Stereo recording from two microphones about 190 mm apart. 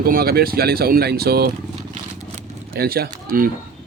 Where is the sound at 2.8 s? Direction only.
55° right (ahead or behind).